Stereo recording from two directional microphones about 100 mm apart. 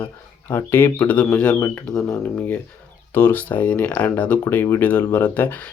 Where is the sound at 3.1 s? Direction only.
20° left (ahead or behind).